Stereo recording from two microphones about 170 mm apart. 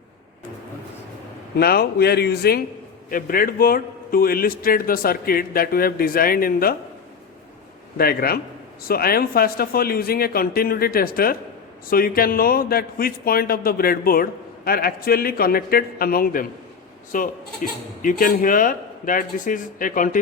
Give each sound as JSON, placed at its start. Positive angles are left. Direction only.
{"t": 1.5, "sound": "speech", "side_deg": 65}
{"t": 3.1, "sound": "a man's voice", "side_deg": 55}
{"t": 7.9, "sound": "a man's voice", "side_deg": 60}